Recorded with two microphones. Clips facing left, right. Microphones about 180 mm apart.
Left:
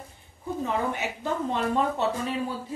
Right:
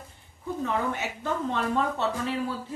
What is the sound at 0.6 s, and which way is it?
Speech, 15° left (ahead or behind).